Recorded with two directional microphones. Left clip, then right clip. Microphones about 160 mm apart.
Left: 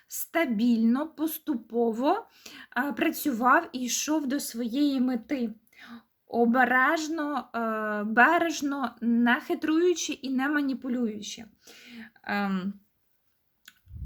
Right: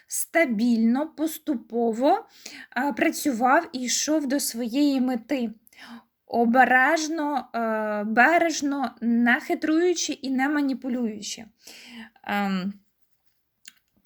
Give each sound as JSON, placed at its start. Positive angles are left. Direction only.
{"t": 0.1, "sound": "speech", "side_deg": -15}